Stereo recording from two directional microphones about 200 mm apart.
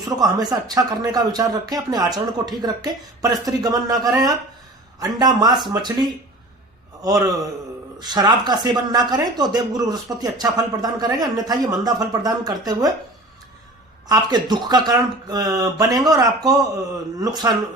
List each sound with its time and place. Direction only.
0.2 s a man's voice: 20° right (ahead or behind)
14.1 s speech: 20° right (ahead or behind)